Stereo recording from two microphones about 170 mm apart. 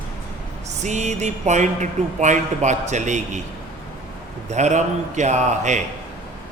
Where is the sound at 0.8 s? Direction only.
45° right (ahead or behind).